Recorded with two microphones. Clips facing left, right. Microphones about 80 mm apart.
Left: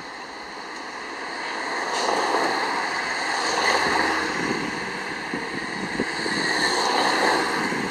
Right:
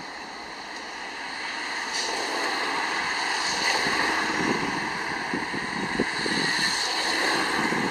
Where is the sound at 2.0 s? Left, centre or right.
Left.